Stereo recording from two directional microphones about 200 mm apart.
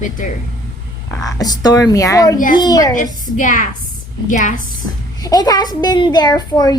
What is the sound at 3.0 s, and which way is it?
A woman's voice, 40° left (ahead or behind).